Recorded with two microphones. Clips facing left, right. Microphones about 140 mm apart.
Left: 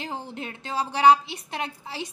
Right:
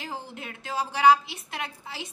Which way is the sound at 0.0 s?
30° left (ahead or behind).